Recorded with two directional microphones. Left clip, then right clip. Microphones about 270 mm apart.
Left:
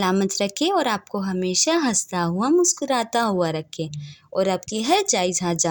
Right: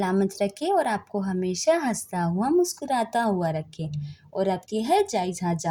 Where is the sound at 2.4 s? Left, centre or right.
Left.